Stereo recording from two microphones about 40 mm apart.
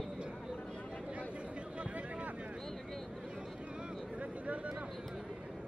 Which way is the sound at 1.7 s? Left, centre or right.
Right.